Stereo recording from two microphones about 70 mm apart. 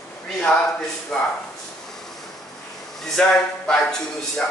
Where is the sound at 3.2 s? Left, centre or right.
Centre.